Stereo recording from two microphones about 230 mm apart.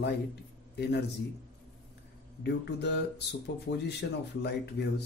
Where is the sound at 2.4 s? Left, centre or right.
Left.